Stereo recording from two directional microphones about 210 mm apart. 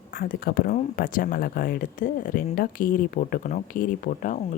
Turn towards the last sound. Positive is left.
turn(degrees=40)  # may be behind; listen again after turning